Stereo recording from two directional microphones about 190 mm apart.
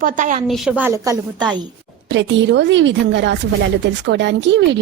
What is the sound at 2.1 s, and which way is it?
A woman's voice, 70° right (ahead or behind).